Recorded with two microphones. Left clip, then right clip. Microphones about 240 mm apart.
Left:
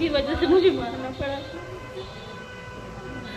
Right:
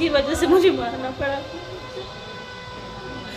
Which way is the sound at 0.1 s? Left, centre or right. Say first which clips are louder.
Right 2 dB; right.